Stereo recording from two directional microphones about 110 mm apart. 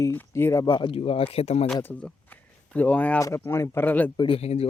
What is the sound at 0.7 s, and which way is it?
Speech, 50° left (ahead or behind).